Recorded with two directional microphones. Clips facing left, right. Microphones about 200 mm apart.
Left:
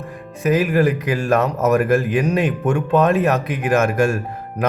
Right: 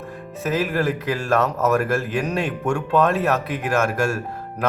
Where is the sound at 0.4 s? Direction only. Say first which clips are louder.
Left 5 dB; 15° left (ahead or behind).